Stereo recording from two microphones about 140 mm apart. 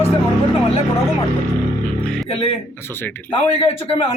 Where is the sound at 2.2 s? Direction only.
45° left (ahead or behind).